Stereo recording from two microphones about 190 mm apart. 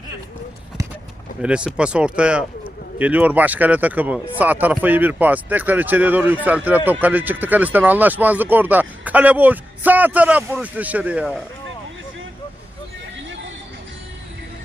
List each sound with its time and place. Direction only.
1.4 s speech: 5° right (ahead or behind)